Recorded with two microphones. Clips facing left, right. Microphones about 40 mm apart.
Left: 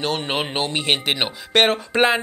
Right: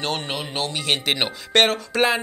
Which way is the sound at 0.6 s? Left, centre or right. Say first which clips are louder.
Even; left.